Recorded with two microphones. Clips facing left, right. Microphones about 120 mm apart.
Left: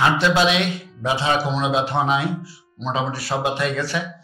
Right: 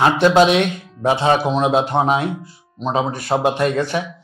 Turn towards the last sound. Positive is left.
turn(degrees=-50)  # may be behind; listen again after turning